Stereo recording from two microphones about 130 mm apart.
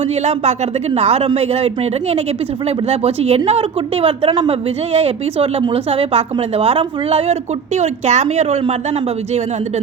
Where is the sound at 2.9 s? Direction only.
50° right (ahead or behind).